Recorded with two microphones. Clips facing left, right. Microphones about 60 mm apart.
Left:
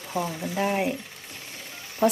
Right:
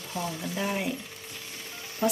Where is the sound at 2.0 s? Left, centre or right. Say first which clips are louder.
Left 5 dB; left.